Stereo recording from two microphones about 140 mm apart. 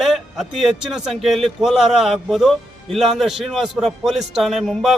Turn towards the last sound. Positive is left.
turn(degrees=0)  # may be behind; listen again after turning